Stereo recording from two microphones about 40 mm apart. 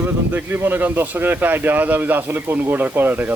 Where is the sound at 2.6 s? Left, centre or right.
Right.